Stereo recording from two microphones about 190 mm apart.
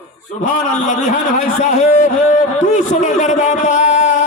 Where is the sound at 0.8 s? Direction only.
40° left (ahead or behind).